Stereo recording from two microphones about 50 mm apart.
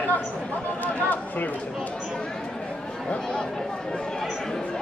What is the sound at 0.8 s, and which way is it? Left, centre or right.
Speech, left.